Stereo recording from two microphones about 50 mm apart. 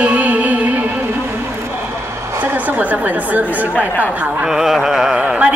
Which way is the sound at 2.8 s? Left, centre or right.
Right.